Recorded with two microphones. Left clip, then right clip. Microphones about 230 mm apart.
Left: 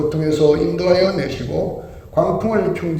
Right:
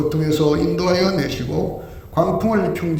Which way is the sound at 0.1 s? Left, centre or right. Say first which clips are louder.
Left 3 dB; right.